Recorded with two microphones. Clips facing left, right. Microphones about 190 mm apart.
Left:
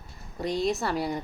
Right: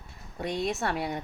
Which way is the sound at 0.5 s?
35° left (ahead or behind).